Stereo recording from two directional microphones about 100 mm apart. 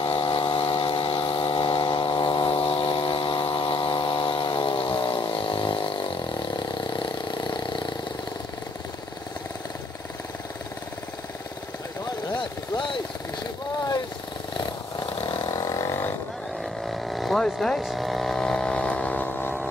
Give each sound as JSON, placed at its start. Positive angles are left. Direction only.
{"t": 0.0, "sound": "a sound", "side_deg": 55}
{"t": 12.4, "sound": "vehicle", "side_deg": 55}
{"t": 15.4, "sound": "vehicle", "side_deg": 35}
{"t": 16.8, "sound": "vehicle", "side_deg": 0}